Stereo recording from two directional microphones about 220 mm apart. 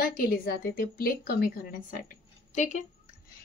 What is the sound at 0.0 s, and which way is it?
A woman's voice, 45° left (ahead or behind).